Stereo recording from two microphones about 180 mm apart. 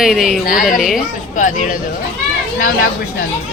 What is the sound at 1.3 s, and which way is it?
Speech, 45° left (ahead or behind).